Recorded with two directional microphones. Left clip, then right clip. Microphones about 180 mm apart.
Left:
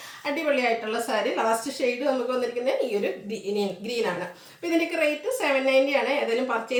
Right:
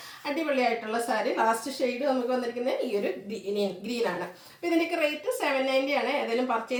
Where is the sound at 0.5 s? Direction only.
15° left (ahead or behind).